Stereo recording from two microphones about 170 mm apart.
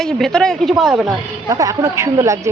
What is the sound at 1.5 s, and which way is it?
Speech, 20° right (ahead or behind).